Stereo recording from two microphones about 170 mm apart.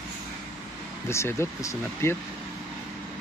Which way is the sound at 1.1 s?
15° left (ahead or behind).